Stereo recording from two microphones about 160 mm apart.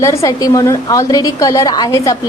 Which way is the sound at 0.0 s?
20° left (ahead or behind).